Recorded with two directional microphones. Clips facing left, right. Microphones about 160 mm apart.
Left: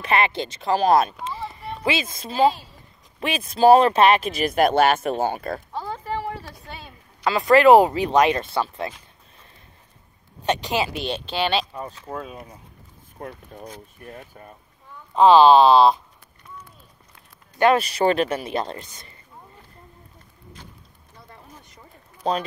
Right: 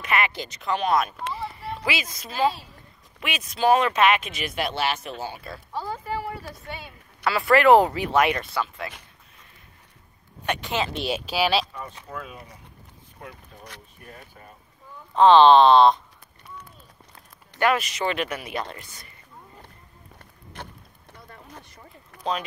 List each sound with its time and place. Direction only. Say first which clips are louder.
0.0 s speech: left 4 dB; 30° left (ahead or behind)
1.4 s a sound: left 3 dB; 20° left (ahead or behind)
3.2 s speech: left 7 dB; 30° left (ahead or behind); by 5.6 s 50° left (ahead or behind)
7.2 s speech: left 3 dB; 20° left (ahead or behind)
10.4 s speech: left 4 dB; 20° left (ahead or behind)
11.0 s speech: even; 5° right (ahead or behind)
12.1 s speech: left 4 dB; 40° left (ahead or behind)
15.1 s speech: left 1 dB; 5° left (ahead or behind)
17.6 s speech: left 5 dB; 30° left (ahead or behind)
20.6 s speech: right 7 dB; 70° right (ahead or behind)
22.1 s a sound: left 5 dB; 75° right (ahead or behind)